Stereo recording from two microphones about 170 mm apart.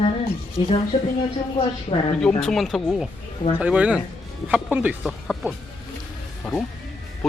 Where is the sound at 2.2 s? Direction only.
5° left (ahead or behind).